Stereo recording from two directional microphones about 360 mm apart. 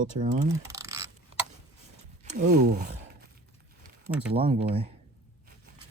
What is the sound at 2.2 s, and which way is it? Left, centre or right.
Speech, centre.